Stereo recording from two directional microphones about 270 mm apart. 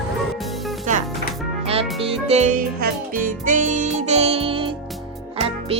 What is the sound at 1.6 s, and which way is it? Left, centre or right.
Music, right.